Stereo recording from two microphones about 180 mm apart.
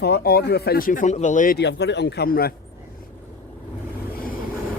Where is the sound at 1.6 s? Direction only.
75° left (ahead or behind).